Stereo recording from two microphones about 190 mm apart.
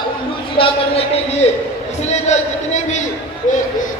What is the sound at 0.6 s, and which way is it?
A man's voice, 35° left (ahead or behind).